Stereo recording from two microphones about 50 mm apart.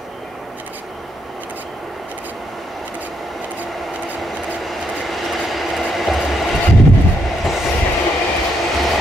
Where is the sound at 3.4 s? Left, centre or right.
Right.